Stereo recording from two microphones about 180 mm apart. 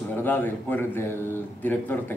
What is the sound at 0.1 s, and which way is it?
Speech, 10° left (ahead or behind).